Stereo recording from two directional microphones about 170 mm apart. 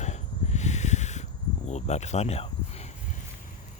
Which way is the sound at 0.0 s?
40° left (ahead or behind).